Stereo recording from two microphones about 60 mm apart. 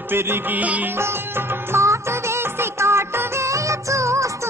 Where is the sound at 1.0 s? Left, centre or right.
Right.